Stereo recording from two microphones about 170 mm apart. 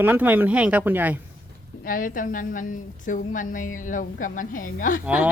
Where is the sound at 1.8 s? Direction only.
55° left (ahead or behind).